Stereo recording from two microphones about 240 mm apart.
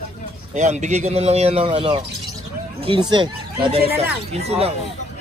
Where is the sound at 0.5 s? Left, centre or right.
Right.